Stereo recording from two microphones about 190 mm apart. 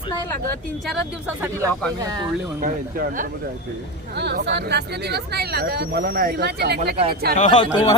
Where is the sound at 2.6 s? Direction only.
45° right (ahead or behind).